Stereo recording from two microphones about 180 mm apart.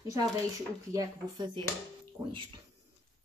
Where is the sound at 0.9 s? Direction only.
25° right (ahead or behind).